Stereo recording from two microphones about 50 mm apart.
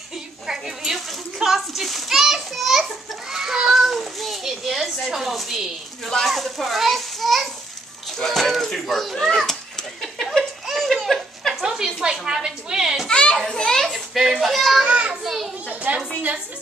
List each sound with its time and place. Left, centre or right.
0.5 s a sound: centre
0.9 s children playing: centre
6.0 s a child's voice: centre
9.5 s cat: centre
10.7 s laughter: centre
11.6 s a sound: centre
13.1 s children playing: centre
14.1 s speech: centre
14.9 s a child's voice: right
15.2 s children playing: centre
15.9 s a woman's voice: right